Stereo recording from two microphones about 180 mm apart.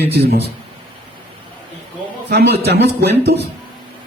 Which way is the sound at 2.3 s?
65° right (ahead or behind).